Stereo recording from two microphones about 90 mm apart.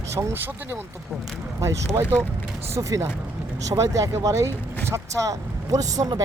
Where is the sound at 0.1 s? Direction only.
35° right (ahead or behind).